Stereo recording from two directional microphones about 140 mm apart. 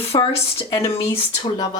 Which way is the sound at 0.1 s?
35° left (ahead or behind).